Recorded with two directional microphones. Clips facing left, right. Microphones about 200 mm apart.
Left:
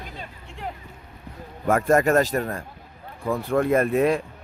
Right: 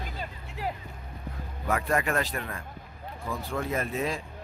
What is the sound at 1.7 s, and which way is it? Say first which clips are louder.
Speech: left 9 dB; 45° left (ahead or behind).